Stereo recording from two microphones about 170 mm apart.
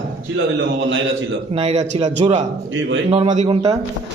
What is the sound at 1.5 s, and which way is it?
Speech, 40° right (ahead or behind).